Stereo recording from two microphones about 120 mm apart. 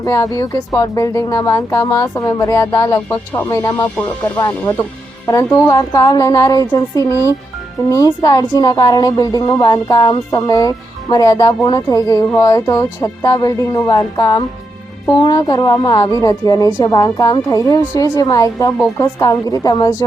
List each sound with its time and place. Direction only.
0.0 s a woman's voice: 25° left (ahead or behind)